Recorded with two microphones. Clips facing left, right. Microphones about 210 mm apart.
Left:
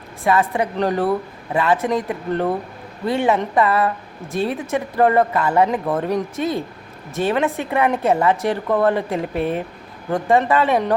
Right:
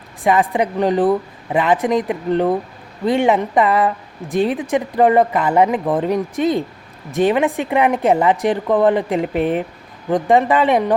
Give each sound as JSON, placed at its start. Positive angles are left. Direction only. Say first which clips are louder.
{"t": 0.3, "sound": "speech", "louder": "right 2 dB", "side_deg": -15}